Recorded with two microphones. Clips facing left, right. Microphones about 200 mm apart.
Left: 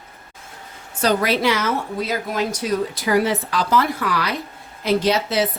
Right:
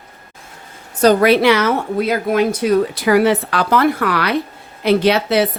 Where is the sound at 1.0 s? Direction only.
55° right (ahead or behind).